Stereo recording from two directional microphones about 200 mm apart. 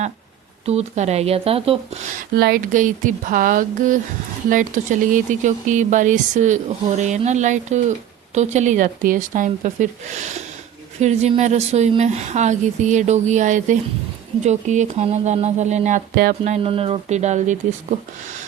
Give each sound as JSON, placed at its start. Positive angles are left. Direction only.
{"t": 0.6, "sound": "speech", "side_deg": -30}
{"t": 2.3, "sound": "speech", "side_deg": -50}